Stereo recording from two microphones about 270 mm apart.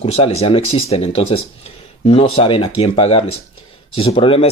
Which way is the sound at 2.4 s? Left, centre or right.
Centre.